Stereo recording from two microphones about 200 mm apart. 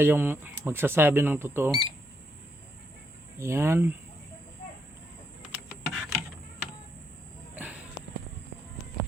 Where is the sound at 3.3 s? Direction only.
15° right (ahead or behind).